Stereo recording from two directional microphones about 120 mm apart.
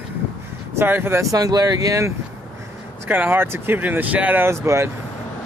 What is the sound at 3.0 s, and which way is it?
Speech, 15° right (ahead or behind).